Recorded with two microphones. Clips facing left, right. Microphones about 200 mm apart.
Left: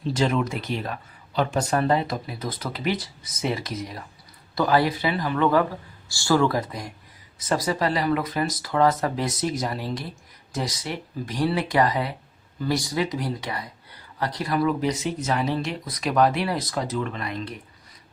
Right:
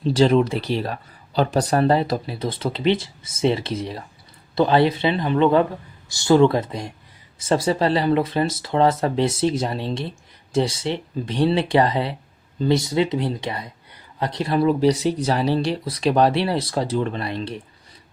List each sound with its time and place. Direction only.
0.1 s speech: 30° right (ahead or behind)